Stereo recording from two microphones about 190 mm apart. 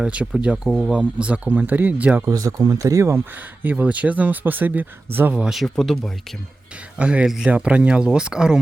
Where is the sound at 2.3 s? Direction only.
20° right (ahead or behind).